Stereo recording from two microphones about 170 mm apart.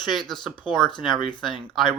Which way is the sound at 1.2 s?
30° left (ahead or behind).